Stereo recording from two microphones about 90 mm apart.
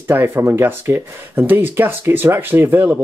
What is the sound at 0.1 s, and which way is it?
Speech, 25° right (ahead or behind).